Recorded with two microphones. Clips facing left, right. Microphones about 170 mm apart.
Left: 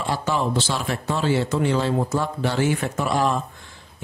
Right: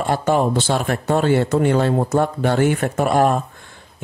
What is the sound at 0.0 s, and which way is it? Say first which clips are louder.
Speech: right 6 dB; 50° right (ahead or behind).